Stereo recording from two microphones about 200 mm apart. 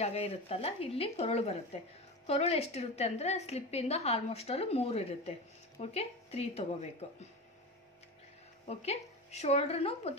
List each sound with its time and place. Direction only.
0.0 s a woman's voice: 30° left (ahead or behind)
8.6 s a woman's voice: 35° left (ahead or behind)